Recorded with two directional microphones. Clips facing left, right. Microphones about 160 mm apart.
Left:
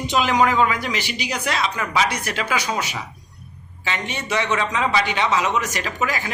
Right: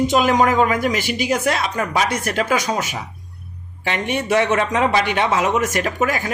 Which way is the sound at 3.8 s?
55° right (ahead or behind).